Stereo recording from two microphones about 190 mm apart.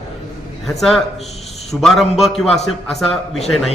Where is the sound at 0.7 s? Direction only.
Centre (ahead or behind).